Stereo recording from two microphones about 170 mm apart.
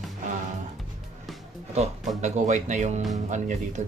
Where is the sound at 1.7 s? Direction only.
45° right (ahead or behind).